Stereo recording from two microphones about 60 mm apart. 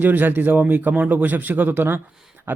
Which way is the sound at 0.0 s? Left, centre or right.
Right.